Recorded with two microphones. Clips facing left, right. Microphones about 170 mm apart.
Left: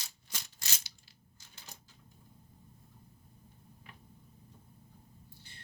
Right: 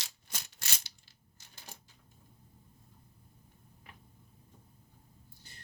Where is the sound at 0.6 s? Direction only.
65° right (ahead or behind).